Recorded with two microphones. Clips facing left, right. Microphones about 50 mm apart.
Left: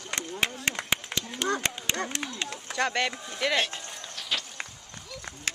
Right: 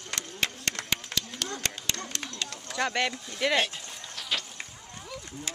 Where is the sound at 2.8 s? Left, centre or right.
Centre.